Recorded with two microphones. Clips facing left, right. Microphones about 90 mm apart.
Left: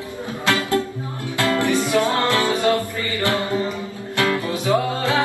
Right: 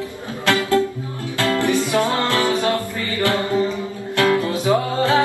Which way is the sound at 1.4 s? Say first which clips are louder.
Even; 20° left (ahead or behind).